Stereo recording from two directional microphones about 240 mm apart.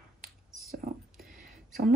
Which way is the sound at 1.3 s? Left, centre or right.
Right.